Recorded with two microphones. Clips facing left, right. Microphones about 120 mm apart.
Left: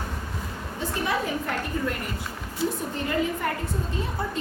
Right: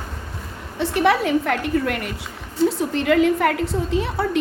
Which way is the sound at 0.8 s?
75° right (ahead or behind).